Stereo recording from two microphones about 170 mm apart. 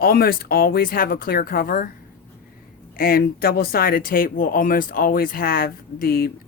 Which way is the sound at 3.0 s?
60° left (ahead or behind).